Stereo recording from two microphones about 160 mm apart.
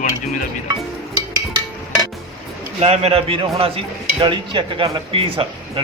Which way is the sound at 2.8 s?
40° right (ahead or behind).